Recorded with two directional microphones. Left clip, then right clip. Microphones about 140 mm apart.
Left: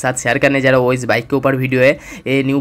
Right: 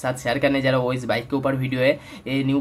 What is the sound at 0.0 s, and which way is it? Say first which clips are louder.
Speech: left 7 dB; 40° left (ahead or behind).